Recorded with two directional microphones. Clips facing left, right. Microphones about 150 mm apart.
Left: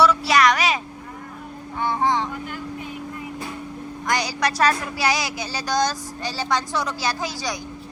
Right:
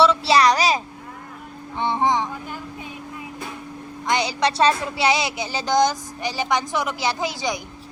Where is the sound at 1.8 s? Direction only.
20° right (ahead or behind).